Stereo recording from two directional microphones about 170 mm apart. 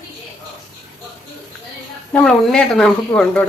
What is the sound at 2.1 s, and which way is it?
A woman's voice, 5° left (ahead or behind).